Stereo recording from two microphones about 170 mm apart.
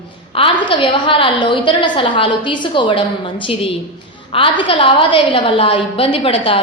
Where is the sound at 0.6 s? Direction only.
30° left (ahead or behind).